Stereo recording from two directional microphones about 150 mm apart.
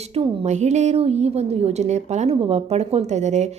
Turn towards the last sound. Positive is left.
turn(degrees=-50)  # may be behind; listen again after turning